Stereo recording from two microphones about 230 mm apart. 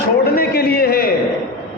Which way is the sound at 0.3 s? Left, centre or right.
Left.